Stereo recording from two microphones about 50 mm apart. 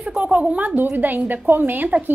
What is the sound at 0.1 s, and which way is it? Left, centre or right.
A woman's voice, right.